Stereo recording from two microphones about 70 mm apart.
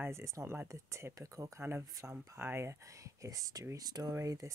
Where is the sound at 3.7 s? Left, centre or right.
Right.